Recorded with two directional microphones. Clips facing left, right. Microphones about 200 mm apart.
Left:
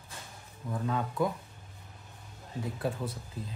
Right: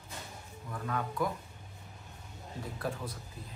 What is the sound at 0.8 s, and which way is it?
Speech, 25° left (ahead or behind).